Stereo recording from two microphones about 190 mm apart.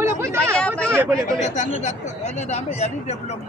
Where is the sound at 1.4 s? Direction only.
40° left (ahead or behind).